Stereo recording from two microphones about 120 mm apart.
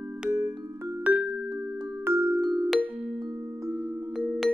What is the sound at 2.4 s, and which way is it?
Music, 35° right (ahead or behind).